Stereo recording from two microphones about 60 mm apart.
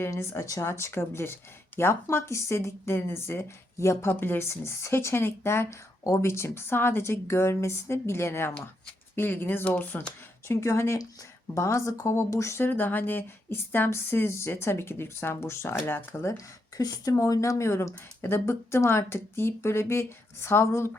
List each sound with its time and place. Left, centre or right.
0.6 s speech: left
4.1 s speech: left
9.6 s speech: left
10.5 s speech: left
12.5 s speech: left
16.7 s speech: left